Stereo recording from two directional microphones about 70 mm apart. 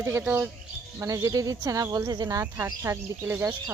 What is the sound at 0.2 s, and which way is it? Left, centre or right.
Speech, right.